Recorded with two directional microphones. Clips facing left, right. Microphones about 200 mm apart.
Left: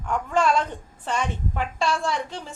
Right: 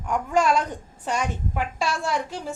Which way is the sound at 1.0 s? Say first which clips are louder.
Even; 10° right (ahead or behind).